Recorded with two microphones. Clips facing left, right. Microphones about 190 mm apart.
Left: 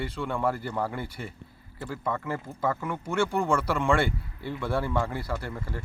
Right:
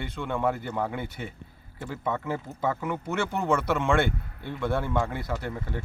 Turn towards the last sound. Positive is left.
turn(degrees=0)  # may be behind; listen again after turning